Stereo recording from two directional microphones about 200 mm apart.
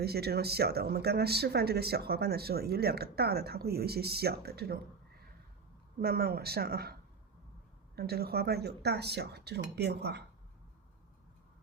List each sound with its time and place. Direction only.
0.0 s speech: 55° right (ahead or behind)
6.0 s speech: 50° right (ahead or behind)
7.9 s speech: 50° right (ahead or behind)